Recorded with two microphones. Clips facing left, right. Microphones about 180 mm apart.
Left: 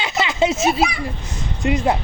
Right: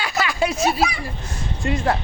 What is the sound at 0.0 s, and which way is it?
A child's voice, 20° left (ahead or behind).